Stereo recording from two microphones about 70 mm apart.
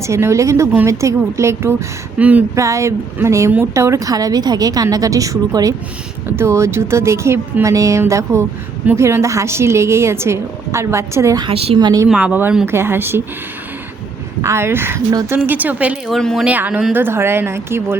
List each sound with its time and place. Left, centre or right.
0.0 s a woman's voice: right
2.1 s speech: right
2.6 s a woman's voice: right
6.2 s a woman's voice: right
11.3 s a woman's voice: right
12.0 s speech: centre
12.6 s a woman's voice: right
14.4 s a woman's voice: right
15.4 s speech: right
16.0 s speech: centre
16.5 s speech: right
16.9 s a woman's voice: right